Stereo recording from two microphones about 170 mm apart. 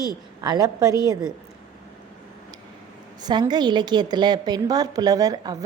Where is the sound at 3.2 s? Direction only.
25° right (ahead or behind).